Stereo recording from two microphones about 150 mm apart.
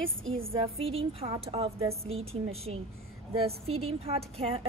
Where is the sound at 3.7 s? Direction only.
40° right (ahead or behind).